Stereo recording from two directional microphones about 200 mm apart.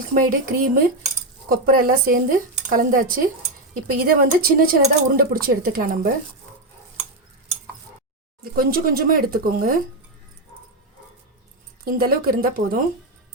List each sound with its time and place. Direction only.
0.1 s speech: 45° right (ahead or behind)
8.5 s speech: 45° right (ahead or behind)
11.9 s speech: 45° right (ahead or behind)